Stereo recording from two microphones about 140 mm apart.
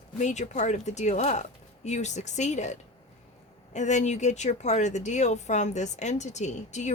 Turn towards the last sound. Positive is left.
turn(degrees=55)  # may be behind; listen again after turning